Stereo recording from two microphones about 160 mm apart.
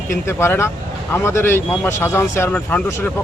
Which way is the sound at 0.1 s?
15° left (ahead or behind).